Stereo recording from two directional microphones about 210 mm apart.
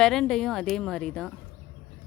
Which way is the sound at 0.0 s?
Centre (ahead or behind).